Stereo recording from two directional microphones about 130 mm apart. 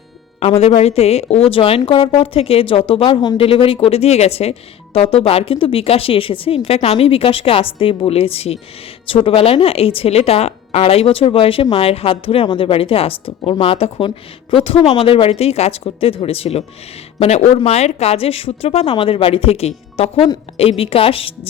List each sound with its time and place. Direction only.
0.3 s a woman's voice: 55° left (ahead or behind)